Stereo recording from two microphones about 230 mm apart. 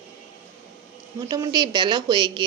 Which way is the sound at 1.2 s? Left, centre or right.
Centre.